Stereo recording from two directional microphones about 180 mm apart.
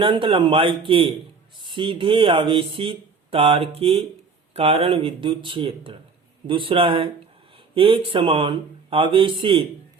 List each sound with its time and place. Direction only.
0.0 s speech: 30° right (ahead or behind)